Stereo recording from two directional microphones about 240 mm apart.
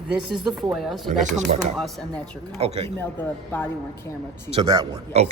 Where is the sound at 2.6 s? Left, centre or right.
Right.